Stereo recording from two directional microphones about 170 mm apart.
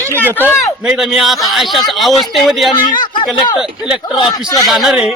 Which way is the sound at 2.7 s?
25° left (ahead or behind).